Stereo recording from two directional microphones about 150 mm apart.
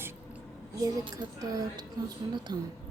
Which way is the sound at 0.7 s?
30° right (ahead or behind).